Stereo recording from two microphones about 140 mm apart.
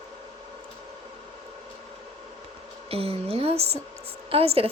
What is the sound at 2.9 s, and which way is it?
A woman's voice, 45° right (ahead or behind).